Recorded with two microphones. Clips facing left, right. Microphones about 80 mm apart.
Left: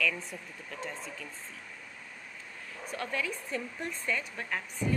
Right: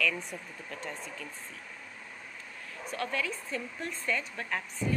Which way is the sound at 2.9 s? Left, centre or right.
Left.